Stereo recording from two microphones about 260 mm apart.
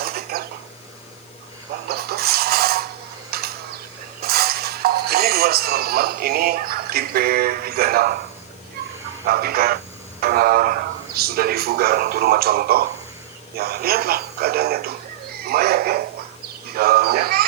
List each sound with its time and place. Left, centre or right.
0.0 s a sound: right
1.9 s vehicle: right
3.3 s mechanisms: right
4.2 s speech: right
9.2 s a man's voice: right